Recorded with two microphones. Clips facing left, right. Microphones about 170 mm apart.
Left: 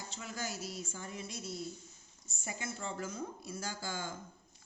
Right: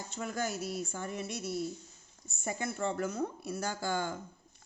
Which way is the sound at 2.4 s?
55° right (ahead or behind).